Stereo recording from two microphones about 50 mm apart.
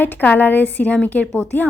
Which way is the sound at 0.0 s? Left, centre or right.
Left.